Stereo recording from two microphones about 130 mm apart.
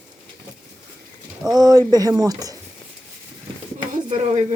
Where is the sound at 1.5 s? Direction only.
30° right (ahead or behind).